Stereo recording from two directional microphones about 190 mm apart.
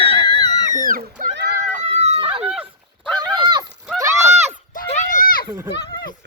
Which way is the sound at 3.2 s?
20° right (ahead or behind).